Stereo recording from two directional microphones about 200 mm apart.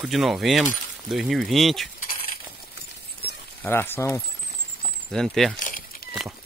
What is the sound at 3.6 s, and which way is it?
Speech, 10° left (ahead or behind).